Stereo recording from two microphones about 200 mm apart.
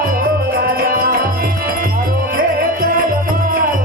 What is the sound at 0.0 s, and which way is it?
Music, 45° right (ahead or behind).